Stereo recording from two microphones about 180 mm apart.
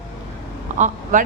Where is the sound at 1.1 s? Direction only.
45° right (ahead or behind).